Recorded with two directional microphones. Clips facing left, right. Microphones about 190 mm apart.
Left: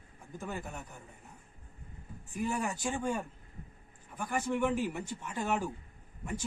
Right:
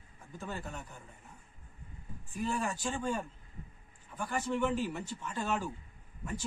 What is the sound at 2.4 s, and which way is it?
Speech, 15° left (ahead or behind).